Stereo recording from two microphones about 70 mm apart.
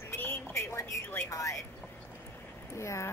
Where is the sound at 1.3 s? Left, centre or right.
Left.